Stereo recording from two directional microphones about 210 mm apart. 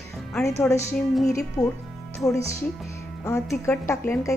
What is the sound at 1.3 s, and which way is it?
Speech, 15° left (ahead or behind).